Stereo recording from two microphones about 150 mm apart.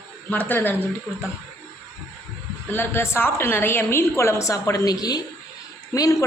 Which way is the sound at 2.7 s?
15° left (ahead or behind).